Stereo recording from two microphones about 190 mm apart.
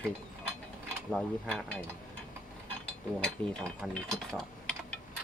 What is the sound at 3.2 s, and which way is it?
Speech, 5° left (ahead or behind).